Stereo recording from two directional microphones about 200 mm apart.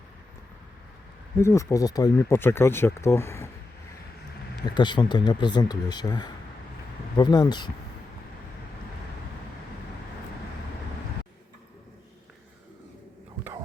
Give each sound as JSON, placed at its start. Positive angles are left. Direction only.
{"t": 1.4, "sound": "speech", "side_deg": 15}
{"t": 4.6, "sound": "speech", "side_deg": 20}